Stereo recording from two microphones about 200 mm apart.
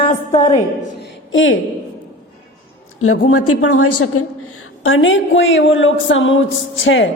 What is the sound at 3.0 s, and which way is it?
A woman's voice, 90° left.